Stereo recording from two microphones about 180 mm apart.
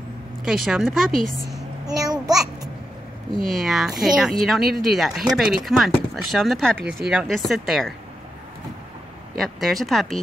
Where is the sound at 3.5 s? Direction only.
Centre (ahead or behind).